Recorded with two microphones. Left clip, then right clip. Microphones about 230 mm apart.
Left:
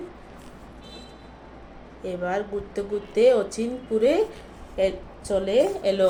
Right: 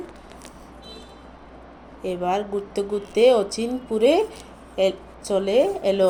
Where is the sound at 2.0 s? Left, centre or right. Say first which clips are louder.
Right 3 dB; right.